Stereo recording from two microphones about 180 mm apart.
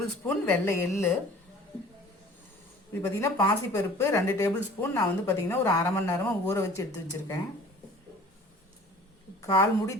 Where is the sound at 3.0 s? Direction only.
15° left (ahead or behind).